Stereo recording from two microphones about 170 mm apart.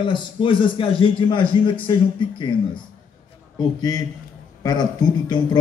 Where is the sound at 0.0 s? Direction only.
30° left (ahead or behind).